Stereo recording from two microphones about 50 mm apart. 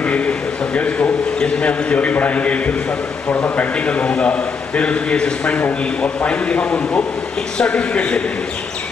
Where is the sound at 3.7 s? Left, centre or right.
Left.